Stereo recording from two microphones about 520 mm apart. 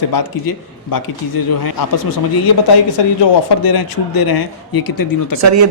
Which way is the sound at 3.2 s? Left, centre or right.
Left.